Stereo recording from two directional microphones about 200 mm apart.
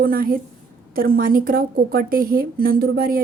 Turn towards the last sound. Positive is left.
turn(degrees=-50)  # may be behind; listen again after turning